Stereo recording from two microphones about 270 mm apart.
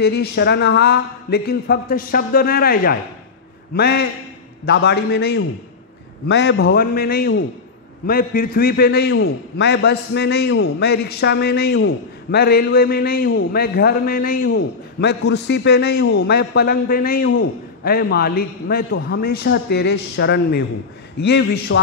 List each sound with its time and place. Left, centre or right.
0.0 s a man's voice: left